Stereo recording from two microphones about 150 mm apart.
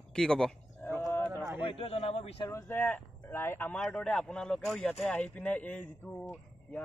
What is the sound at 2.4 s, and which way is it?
Speech, 15° left (ahead or behind).